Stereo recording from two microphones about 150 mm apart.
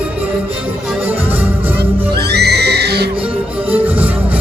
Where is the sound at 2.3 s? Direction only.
90° right.